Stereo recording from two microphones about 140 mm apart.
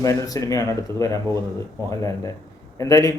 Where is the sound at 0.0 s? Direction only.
25° left (ahead or behind).